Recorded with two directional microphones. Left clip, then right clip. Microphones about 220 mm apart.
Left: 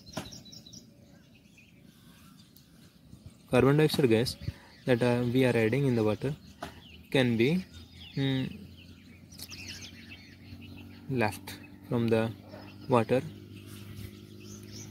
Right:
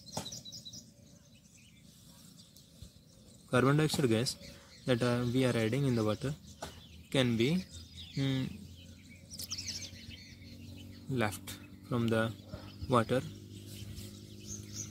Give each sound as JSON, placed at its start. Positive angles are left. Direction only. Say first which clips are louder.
{"t": 3.4, "sound": "speech", "louder": "left 5 dB", "side_deg": 10}
{"t": 8.1, "sound": "bird", "louder": "left 4 dB", "side_deg": 5}
{"t": 11.1, "sound": "speech", "louder": "left 4 dB", "side_deg": 10}